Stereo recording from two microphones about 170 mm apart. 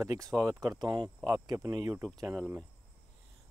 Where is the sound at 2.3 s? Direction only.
10° right (ahead or behind).